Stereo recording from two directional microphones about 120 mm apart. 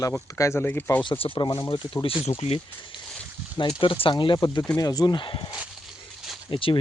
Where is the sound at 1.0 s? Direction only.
45° left (ahead or behind).